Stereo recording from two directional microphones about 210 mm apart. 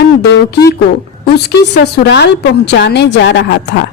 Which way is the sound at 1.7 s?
55° left (ahead or behind).